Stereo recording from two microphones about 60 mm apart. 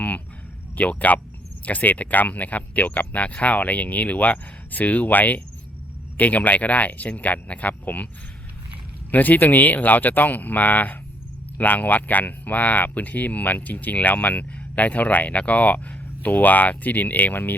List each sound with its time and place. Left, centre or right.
0.8 s speech: left
9.1 s speech: left